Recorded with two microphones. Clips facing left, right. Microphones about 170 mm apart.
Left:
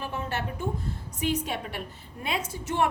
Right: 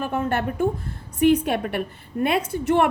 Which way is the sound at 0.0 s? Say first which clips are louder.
Right 8 dB; 55° right (ahead or behind).